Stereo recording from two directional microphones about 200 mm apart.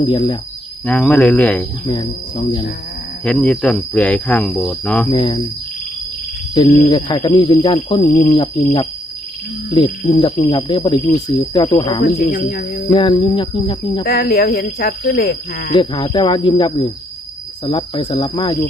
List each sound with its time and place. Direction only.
0.0 s speech: 25° left (ahead or behind)
0.9 s speech: 5° left (ahead or behind)
1.9 s speech: 20° left (ahead or behind)
3.2 s speech: 5° left (ahead or behind)
5.1 s speech: 25° left (ahead or behind)
6.5 s speech: 20° left (ahead or behind)
12.2 s speech: 45° left (ahead or behind)
12.9 s speech: 25° left (ahead or behind)
14.0 s speech: 50° left (ahead or behind)
15.7 s speech: 25° left (ahead or behind)